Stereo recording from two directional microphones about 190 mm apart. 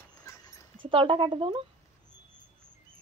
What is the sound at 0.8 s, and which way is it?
Speech, 25° right (ahead or behind).